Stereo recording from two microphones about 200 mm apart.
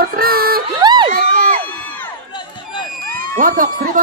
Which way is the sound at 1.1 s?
40° right (ahead or behind).